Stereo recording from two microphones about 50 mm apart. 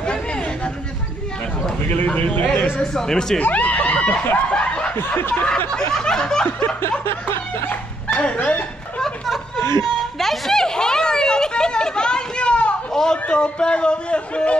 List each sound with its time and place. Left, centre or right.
0.0 s chatter: centre
2.0 s a man's voice: left
2.8 s snicker: centre
3.4 s speech: left
4.5 s snicker: centre
4.9 s snicker: left
5.3 s a man's voice: left
5.8 s snicker: centre
6.4 s a man's voice: left
6.8 s chuckle: left
7.7 s dog: left
9.0 s a sound: centre; by 12.7 s left
12.9 s a man's voice: centre